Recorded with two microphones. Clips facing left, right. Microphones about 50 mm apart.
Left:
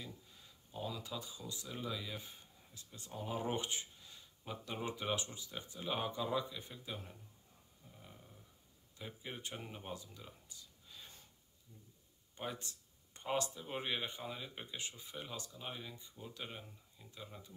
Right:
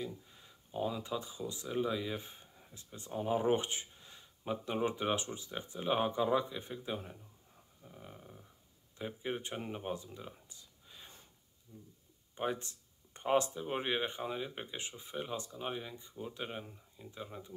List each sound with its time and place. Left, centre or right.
0.3 s speech: right